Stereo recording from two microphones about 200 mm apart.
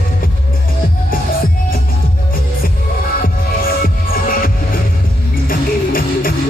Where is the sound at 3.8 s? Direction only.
45° left (ahead or behind).